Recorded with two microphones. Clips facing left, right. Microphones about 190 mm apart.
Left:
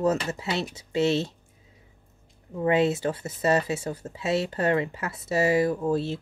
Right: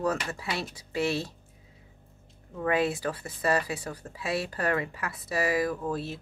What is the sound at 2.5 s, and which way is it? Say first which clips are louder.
Speech: left 4 dB; 25° left (ahead or behind).